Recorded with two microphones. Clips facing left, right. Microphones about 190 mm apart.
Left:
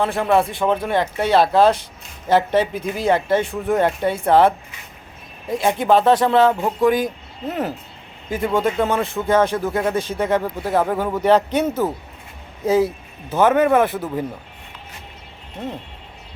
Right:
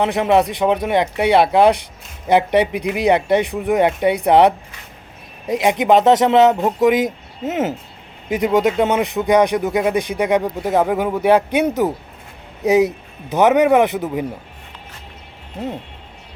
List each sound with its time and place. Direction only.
0.0 s speech: 20° right (ahead or behind)